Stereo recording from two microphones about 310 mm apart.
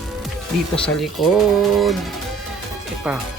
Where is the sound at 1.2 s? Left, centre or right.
Centre.